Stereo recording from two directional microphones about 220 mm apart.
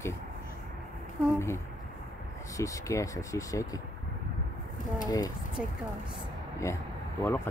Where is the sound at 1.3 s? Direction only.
10° left (ahead or behind).